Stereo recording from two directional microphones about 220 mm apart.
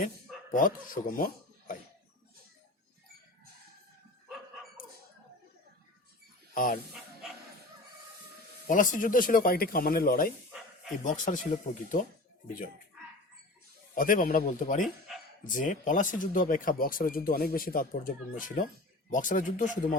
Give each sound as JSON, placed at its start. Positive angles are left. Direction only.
{"t": 0.5, "sound": "speech", "side_deg": 40}
{"t": 6.5, "sound": "speech", "side_deg": 40}
{"t": 8.6, "sound": "speech", "side_deg": 35}
{"t": 13.9, "sound": "speech", "side_deg": 40}
{"t": 14.8, "sound": "speech", "side_deg": 0}
{"t": 15.5, "sound": "speech", "side_deg": 35}